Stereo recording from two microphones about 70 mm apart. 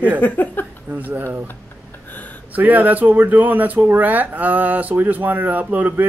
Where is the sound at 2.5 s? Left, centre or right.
Right.